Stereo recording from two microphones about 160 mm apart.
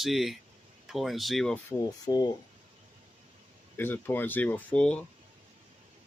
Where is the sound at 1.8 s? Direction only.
25° left (ahead or behind).